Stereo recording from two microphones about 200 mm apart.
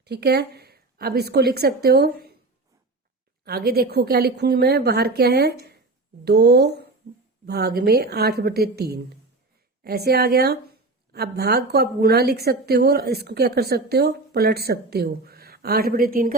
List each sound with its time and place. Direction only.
0.0 s a woman's voice: 55° right (ahead or behind)
3.4 s speech: 50° right (ahead or behind)